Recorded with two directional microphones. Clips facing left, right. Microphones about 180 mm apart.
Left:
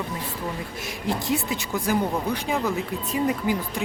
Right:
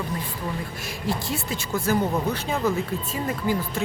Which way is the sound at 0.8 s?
20° left (ahead or behind).